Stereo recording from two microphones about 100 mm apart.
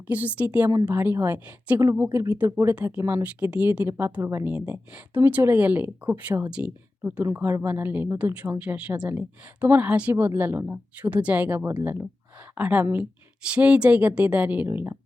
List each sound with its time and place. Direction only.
0.1 s speech: 15° right (ahead or behind)
3.4 s speech: 15° right (ahead or behind)
4.4 s speech: 10° right (ahead or behind)
7.3 s speech: 25° right (ahead or behind)